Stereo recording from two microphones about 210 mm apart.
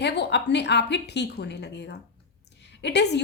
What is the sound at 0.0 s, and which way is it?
A woman's voice, 55° left (ahead or behind).